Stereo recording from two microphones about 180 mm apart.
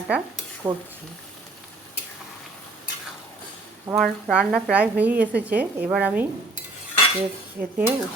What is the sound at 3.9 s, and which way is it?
Speech, centre (ahead or behind).